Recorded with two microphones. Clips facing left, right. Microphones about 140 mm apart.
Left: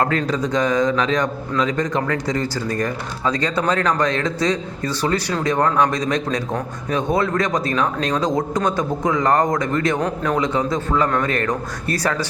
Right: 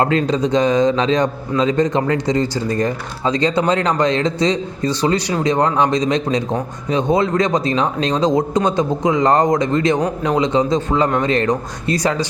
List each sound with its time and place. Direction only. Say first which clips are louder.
0.0 s a man's voice: right 4 dB; 25° right (ahead or behind)